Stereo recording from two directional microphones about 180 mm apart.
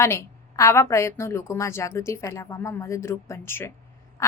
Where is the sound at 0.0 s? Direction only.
15° left (ahead or behind).